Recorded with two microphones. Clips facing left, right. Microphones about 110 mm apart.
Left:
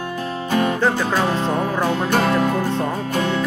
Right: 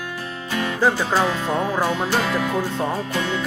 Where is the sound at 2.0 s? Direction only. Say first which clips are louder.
Left 4 dB; 50° left (ahead or behind).